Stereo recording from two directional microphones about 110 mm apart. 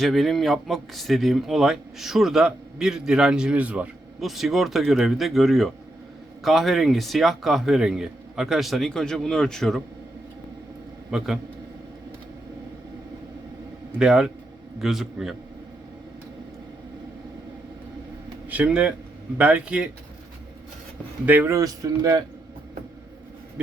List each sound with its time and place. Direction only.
0.0 s a man's voice: centre (ahead or behind)
4.2 s a man's voice: centre (ahead or behind)
11.1 s a man's voice: 5° right (ahead or behind)
14.0 s a man's voice: 5° right (ahead or behind)
18.4 s speech: 10° right (ahead or behind)
21.2 s speech: 15° right (ahead or behind)
21.5 s speech: 35° right (ahead or behind)